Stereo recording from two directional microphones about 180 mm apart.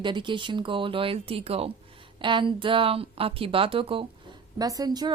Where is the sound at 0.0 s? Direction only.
25° right (ahead or behind).